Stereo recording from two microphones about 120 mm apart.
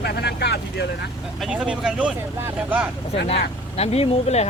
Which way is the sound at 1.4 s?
5° right (ahead or behind).